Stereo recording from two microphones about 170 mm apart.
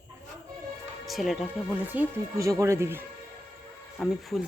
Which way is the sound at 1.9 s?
10° right (ahead or behind).